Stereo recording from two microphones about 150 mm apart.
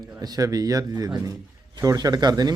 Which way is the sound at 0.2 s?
25° right (ahead or behind).